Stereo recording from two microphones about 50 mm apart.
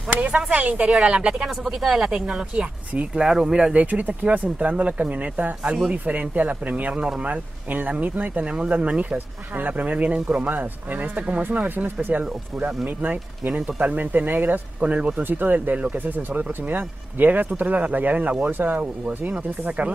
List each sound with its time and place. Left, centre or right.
0.1 s speech: right
1.6 s speech: centre
2.0 s speech: centre
3.7 s speech: right
6.9 s speech: centre
7.2 s speech: right
13.4 s speech: right
13.9 s speech: right
14.8 s speech: right